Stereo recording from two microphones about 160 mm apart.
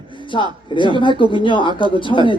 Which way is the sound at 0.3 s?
35° left (ahead or behind).